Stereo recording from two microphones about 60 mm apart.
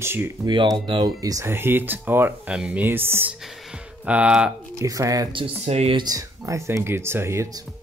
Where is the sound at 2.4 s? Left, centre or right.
Centre.